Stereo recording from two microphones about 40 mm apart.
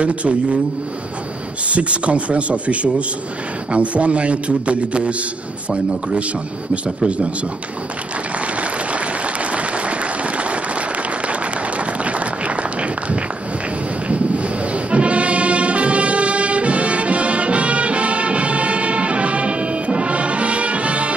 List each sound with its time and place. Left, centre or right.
0.0 s a man's voice: right
1.7 s a man's voice: right
8.5 s applause: right
11.8 s a sound: right
14.0 s brass instrument: right